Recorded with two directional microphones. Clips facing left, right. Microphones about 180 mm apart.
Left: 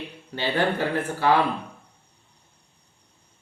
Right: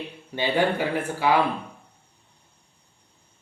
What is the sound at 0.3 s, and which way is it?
A woman's voice, 15° right (ahead or behind).